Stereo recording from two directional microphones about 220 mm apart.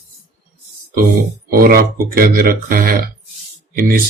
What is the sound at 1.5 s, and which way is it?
Speech, 45° right (ahead or behind).